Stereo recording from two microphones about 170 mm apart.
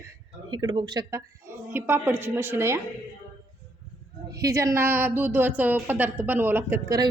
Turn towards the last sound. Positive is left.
turn(degrees=-20)  # may be behind; listen again after turning